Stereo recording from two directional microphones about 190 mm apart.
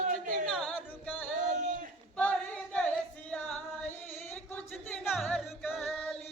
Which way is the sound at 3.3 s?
5° left (ahead or behind).